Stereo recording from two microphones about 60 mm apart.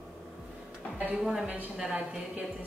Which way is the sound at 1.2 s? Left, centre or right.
Centre.